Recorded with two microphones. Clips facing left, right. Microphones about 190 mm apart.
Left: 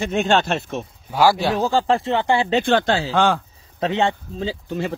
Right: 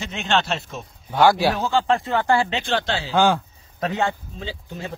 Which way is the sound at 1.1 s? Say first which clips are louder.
Even; centre (ahead or behind).